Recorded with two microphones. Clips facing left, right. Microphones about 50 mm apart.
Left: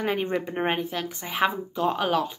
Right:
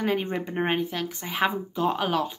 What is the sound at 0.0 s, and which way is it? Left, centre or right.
A woman's voice, centre.